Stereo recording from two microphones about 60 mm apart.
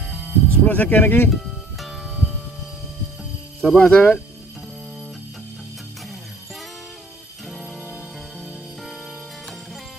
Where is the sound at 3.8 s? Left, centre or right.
Centre.